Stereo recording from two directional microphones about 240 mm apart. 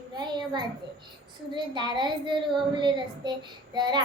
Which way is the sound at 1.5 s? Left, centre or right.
Centre.